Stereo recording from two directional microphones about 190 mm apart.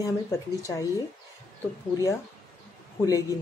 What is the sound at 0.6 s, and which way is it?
Speech, 15° left (ahead or behind).